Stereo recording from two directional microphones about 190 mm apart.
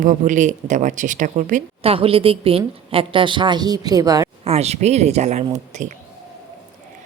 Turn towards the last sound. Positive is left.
turn(degrees=-35)  # may be behind; listen again after turning